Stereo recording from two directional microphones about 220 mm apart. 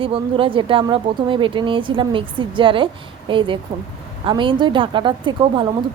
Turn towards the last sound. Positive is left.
turn(degrees=-20)  # may be behind; listen again after turning